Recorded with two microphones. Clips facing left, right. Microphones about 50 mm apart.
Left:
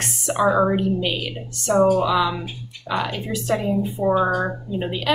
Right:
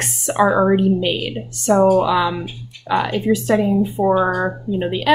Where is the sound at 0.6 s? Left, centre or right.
Right.